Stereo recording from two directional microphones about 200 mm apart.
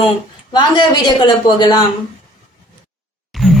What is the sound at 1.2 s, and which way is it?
Speech, 20° left (ahead or behind).